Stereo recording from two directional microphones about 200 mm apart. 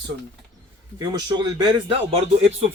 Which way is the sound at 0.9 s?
20° right (ahead or behind).